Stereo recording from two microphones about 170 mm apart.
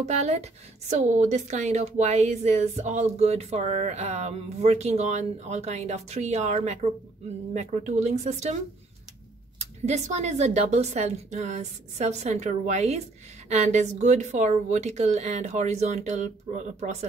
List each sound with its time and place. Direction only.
0.0 s a woman's voice: 40° right (ahead or behind)
9.6 s a woman's voice: 40° right (ahead or behind)